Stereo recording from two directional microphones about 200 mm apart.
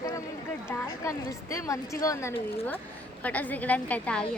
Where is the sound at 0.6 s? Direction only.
15° left (ahead or behind).